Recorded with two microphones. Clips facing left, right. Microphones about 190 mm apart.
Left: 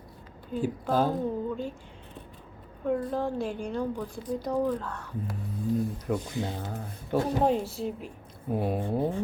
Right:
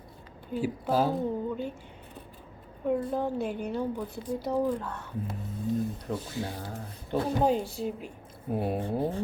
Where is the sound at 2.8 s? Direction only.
5° right (ahead or behind).